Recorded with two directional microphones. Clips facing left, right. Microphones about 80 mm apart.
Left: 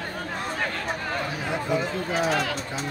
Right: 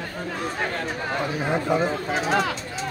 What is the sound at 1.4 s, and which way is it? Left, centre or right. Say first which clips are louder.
Speech: right 5 dB; right.